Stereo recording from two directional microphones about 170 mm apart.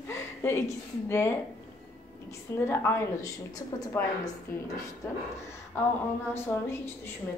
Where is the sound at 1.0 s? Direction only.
15° left (ahead or behind).